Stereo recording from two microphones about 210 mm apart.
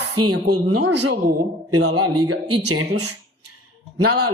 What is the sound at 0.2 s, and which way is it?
Speech, 90° right.